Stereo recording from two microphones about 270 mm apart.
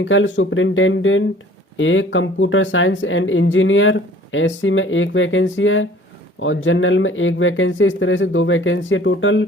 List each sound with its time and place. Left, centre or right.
0.0 s speech: left